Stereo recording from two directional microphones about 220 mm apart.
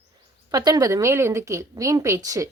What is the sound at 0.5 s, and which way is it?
A woman's voice, 15° right (ahead or behind).